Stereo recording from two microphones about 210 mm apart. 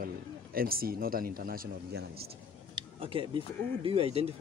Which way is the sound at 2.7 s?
25° right (ahead or behind).